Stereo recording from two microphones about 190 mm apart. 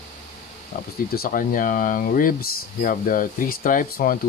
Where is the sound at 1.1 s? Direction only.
50° left (ahead or behind).